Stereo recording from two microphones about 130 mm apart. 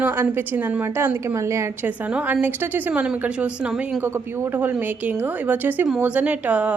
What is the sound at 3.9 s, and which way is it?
A woman's voice, 20° right (ahead or behind).